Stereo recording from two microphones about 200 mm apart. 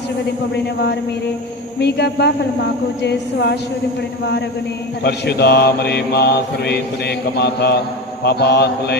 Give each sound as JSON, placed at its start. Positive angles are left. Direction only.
{"t": 0.5, "sound": "speech", "side_deg": 55}
{"t": 5.0, "sound": "mantra", "side_deg": 55}
{"t": 7.3, "sound": "speech", "side_deg": 55}